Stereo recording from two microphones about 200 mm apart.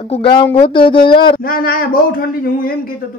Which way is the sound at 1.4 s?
45° left (ahead or behind).